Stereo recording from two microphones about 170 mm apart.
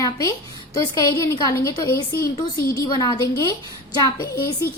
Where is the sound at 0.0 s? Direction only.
20° left (ahead or behind).